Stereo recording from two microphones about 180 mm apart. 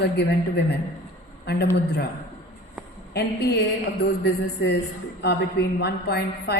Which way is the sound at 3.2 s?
65° left (ahead or behind).